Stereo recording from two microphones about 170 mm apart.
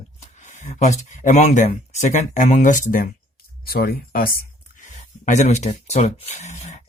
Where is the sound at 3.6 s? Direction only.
65° left (ahead or behind).